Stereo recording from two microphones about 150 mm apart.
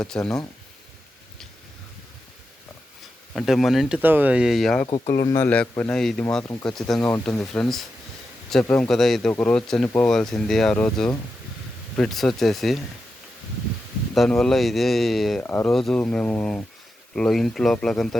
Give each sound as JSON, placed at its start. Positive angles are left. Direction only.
{"t": 0.0, "sound": "speech", "side_deg": 5}
{"t": 3.3, "sound": "speech", "side_deg": 0}
{"t": 5.2, "sound": "speech", "side_deg": 25}
{"t": 5.5, "sound": "speech", "side_deg": 10}
{"t": 14.1, "sound": "speech", "side_deg": 5}
{"t": 15.4, "sound": "speech", "side_deg": 15}
{"t": 15.7, "sound": "speech", "side_deg": 5}